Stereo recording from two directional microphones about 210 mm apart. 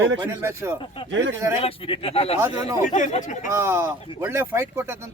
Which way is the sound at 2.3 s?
15° right (ahead or behind).